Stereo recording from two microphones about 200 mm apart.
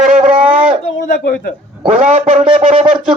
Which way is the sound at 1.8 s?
35° right (ahead or behind).